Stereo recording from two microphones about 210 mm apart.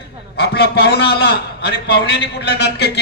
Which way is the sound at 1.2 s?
50° left (ahead or behind).